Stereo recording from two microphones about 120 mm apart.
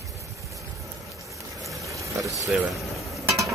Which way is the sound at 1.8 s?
25° right (ahead or behind).